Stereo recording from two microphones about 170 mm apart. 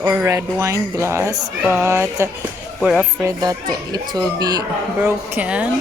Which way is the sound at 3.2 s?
20° right (ahead or behind).